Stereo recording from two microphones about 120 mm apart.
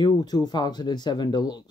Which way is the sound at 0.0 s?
35° left (ahead or behind).